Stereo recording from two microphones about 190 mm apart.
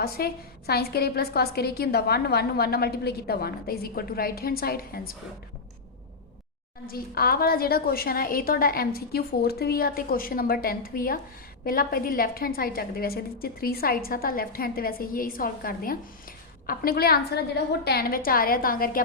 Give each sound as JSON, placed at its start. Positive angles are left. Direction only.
{"t": 0.0, "sound": "a woman's voice", "side_deg": 55}
{"t": 6.8, "sound": "a woman's voice", "side_deg": 50}